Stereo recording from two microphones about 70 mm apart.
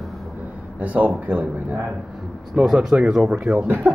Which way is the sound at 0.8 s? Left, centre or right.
Right.